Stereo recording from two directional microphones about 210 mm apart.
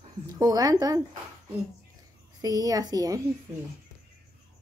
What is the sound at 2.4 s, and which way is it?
Speech, 15° right (ahead or behind).